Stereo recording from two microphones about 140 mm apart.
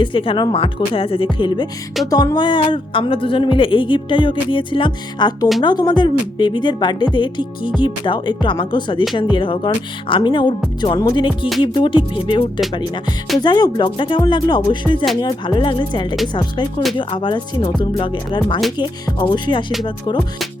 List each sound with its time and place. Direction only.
0.0 s speech: 40° left (ahead or behind)
11.3 s music: centre (ahead or behind)
11.6 s speech: 35° left (ahead or behind)